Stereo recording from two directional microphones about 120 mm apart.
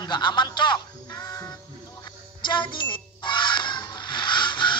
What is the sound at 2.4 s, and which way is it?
Music, 40° left (ahead or behind).